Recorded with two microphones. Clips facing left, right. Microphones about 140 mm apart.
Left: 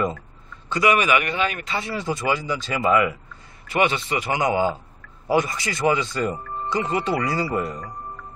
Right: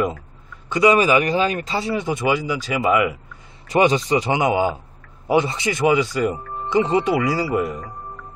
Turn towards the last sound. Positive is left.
turn(degrees=-10)  # may be behind; listen again after turning